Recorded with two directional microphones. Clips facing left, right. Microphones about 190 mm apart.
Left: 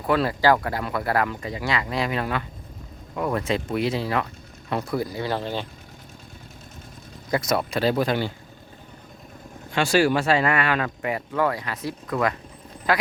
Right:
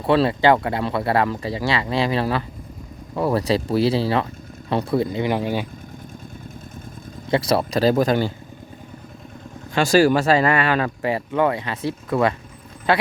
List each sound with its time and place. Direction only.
0.0 s speech: 25° right (ahead or behind); by 5.6 s 10° right (ahead or behind)
7.3 s speech: 30° right (ahead or behind)
9.7 s speech: 40° right (ahead or behind)